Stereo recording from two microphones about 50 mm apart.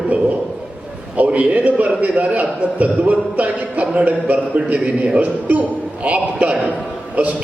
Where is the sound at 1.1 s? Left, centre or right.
Right.